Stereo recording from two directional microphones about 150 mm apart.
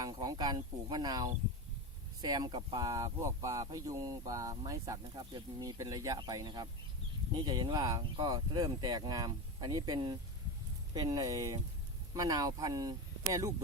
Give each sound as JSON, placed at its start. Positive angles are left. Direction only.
{"t": 0.0, "sound": "speech", "side_deg": -25}